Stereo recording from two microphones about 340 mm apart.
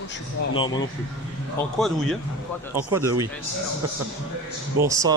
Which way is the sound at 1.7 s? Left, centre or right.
Centre.